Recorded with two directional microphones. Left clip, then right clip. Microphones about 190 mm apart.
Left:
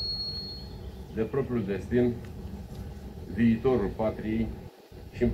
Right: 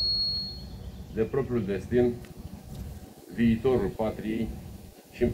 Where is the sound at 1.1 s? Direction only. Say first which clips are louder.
Right 2 dB; 5° right (ahead or behind).